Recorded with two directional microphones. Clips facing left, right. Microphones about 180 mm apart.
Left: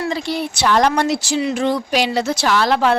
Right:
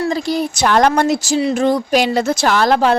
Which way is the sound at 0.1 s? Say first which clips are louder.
Right 4 dB; 40° right (ahead or behind).